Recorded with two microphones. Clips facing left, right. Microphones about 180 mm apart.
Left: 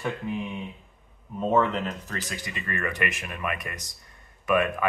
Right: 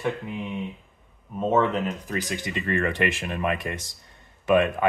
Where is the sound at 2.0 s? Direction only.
20° right (ahead or behind).